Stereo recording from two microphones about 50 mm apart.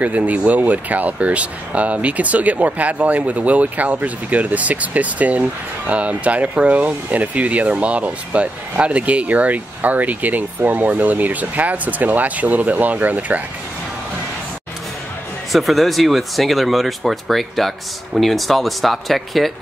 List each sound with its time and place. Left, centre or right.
0.0 s speech: right
15.5 s speech: centre